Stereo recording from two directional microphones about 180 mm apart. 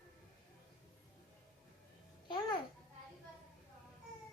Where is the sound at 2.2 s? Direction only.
25° left (ahead or behind).